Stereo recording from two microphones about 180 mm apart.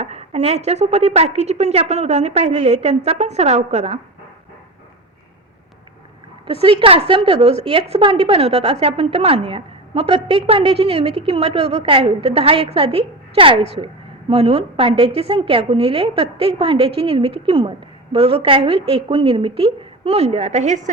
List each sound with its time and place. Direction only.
0.0 s a woman's voice: 35° right (ahead or behind)
6.5 s a woman's voice: 30° right (ahead or behind)